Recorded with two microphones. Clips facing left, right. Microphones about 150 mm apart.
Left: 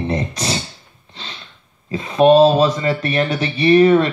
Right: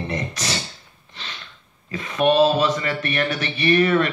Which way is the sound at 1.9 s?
30° left (ahead or behind).